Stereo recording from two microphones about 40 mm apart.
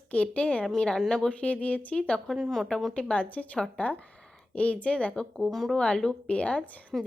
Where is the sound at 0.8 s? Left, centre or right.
Centre.